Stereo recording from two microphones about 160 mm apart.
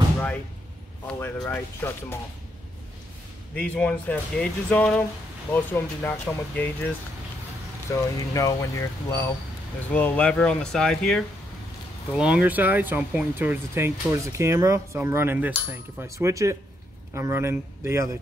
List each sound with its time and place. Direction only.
1.0 s speech: 10° left (ahead or behind)
3.5 s speech: 5° left (ahead or behind)
7.9 s speech: 20° left (ahead or behind); by 18.1 s 15° right (ahead or behind)